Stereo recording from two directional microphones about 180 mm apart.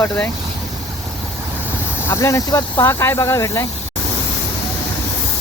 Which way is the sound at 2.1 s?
15° left (ahead or behind).